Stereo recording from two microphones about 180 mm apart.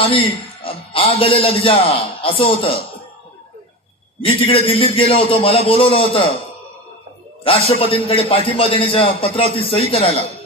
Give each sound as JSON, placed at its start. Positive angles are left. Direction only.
{"t": 0.0, "sound": "a man's voice", "side_deg": 30}
{"t": 4.2, "sound": "a man's voice", "side_deg": 30}
{"t": 7.4, "sound": "speech", "side_deg": 30}